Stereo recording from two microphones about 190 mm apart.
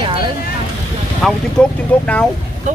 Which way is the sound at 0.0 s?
25° right (ahead or behind).